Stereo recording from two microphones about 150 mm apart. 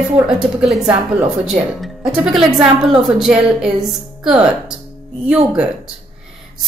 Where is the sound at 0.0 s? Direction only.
5° right (ahead or behind).